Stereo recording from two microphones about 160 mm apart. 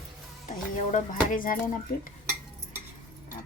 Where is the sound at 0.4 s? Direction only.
50° left (ahead or behind).